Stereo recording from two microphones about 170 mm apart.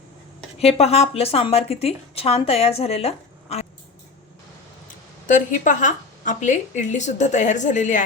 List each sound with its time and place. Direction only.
0.6 s a woman's voice: 35° left (ahead or behind)
5.3 s a woman's voice: 45° left (ahead or behind)